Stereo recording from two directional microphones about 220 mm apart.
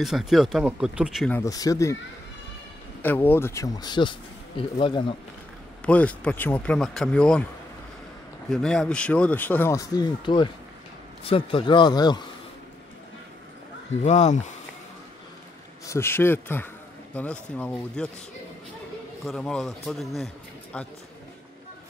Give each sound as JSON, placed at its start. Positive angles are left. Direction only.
{"t": 0.0, "sound": "speech", "side_deg": 0}
{"t": 1.3, "sound": "speech", "side_deg": 15}
{"t": 3.0, "sound": "speech", "side_deg": 10}
{"t": 5.9, "sound": "speech", "side_deg": 5}
{"t": 8.5, "sound": "speech", "side_deg": 5}
{"t": 14.0, "sound": "speech", "side_deg": 30}
{"t": 15.8, "sound": "speech", "side_deg": 10}
{"t": 19.2, "sound": "speech", "side_deg": 5}